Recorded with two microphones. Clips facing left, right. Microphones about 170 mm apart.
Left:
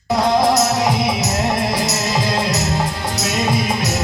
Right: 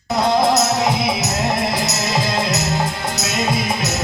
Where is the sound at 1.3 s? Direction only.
10° left (ahead or behind).